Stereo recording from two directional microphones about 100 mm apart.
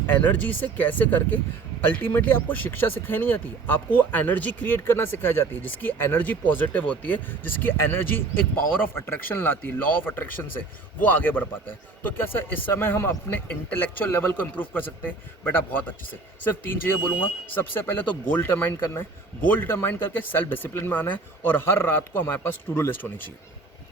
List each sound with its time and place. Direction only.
0.1 s speech: 15° left (ahead or behind)